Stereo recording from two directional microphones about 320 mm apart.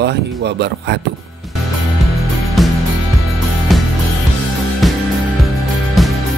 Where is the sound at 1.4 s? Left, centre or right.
Centre.